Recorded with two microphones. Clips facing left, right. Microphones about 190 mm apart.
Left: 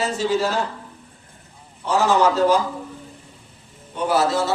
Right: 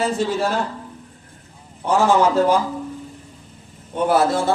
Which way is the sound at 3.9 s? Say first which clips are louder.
Right 2 dB; 55° right (ahead or behind).